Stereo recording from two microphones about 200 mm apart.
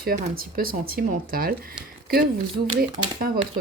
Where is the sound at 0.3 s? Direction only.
45° right (ahead or behind).